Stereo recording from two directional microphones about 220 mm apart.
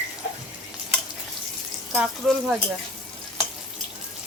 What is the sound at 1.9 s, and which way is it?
Speech, centre (ahead or behind).